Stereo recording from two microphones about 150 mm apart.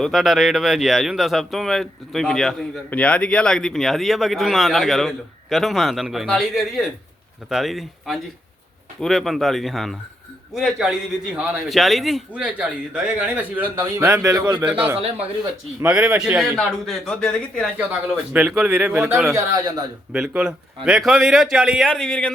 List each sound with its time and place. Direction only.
0.0 s a man's voice: centre (ahead or behind); by 14.7 s 25° right (ahead or behind)
14.7 s a man's voice: 10° right (ahead or behind)
16.6 s speech: 5° left (ahead or behind)
18.3 s a man's voice: 5° right (ahead or behind)
19.5 s speech: 25° right (ahead or behind)
20.1 s speech: 5° right (ahead or behind)